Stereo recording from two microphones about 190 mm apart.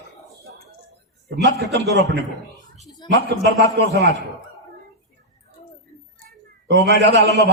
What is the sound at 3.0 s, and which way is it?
Speech, 25° left (ahead or behind).